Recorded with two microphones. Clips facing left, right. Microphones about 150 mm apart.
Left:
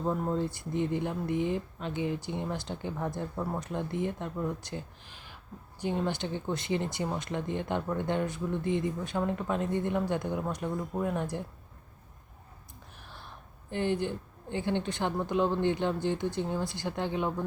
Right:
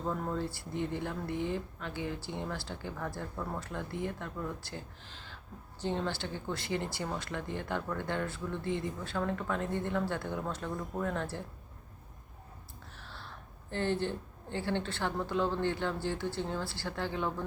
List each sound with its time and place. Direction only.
0.0 s speech: 20° left (ahead or behind)
13.0 s speech: 15° left (ahead or behind)